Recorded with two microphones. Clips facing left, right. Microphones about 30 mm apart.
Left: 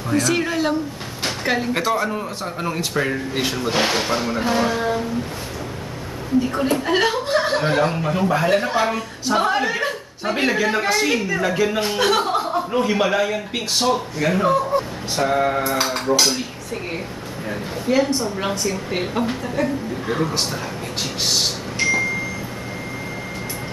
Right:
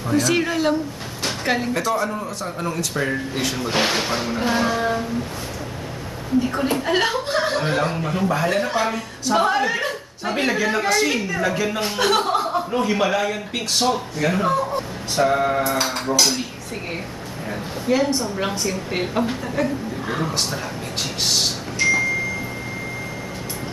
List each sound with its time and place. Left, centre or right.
0.2 s a woman's voice: centre
1.9 s speech: centre
3.7 s a woman's voice: centre
6.4 s a woman's voice: centre
17.5 s a woman's voice: centre